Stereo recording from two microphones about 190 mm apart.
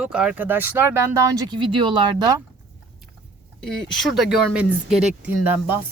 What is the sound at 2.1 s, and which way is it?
Speech, 20° right (ahead or behind).